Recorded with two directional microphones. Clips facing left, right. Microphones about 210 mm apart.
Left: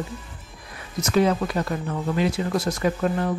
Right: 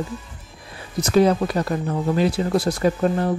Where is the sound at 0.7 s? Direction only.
35° right (ahead or behind).